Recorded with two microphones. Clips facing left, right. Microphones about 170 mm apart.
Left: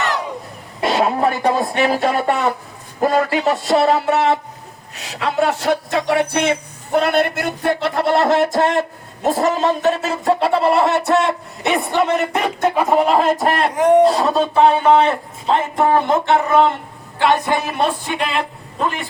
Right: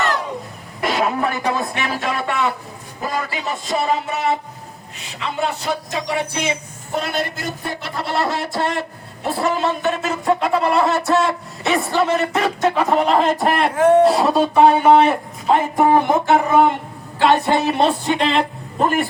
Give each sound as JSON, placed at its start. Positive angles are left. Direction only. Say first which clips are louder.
{"t": 0.8, "sound": "speech", "louder": "left 3 dB", "side_deg": 30}
{"t": 3.0, "sound": "speech", "louder": "left 9 dB", "side_deg": 55}
{"t": 13.4, "sound": "speech", "louder": "even", "side_deg": 0}
{"t": 13.7, "sound": "speech", "louder": "even", "side_deg": 15}
{"t": 14.0, "sound": "speech", "louder": "even", "side_deg": -5}
{"t": 17.2, "sound": "music", "louder": "right 1 dB", "side_deg": -30}